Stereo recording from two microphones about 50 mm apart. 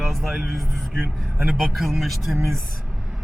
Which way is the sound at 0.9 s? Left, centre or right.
Centre.